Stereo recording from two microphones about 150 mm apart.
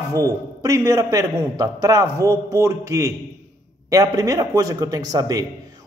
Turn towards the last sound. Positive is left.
turn(degrees=-25)  # may be behind; listen again after turning